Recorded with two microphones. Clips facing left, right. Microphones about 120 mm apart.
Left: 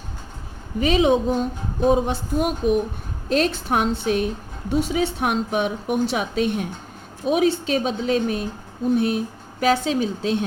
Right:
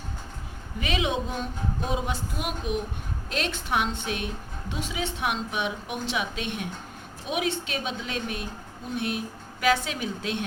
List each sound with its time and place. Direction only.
0.8 s a woman's voice: 35° left (ahead or behind)